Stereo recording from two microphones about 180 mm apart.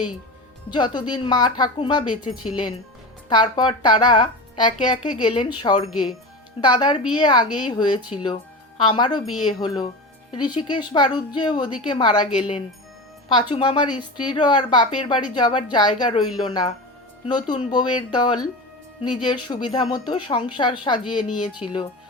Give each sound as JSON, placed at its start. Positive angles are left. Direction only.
{"t": 0.7, "sound": "a woman's voice", "side_deg": 25}